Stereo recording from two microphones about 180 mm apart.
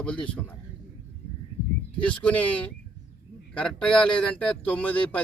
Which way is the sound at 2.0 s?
5° left (ahead or behind).